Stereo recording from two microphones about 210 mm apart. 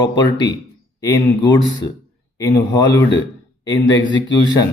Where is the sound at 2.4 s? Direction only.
15° left (ahead or behind).